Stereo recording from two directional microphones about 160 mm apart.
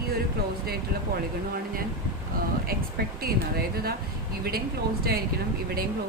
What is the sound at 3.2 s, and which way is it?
Speech, 75° right (ahead or behind).